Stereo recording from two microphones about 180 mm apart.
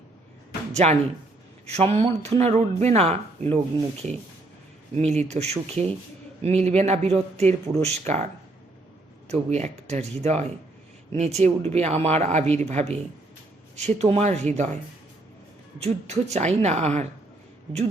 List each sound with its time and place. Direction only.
0.7 s speech: 35° right (ahead or behind)
4.9 s speech: 35° right (ahead or behind)
9.3 s speech: 40° right (ahead or behind)
15.8 s speech: 35° right (ahead or behind)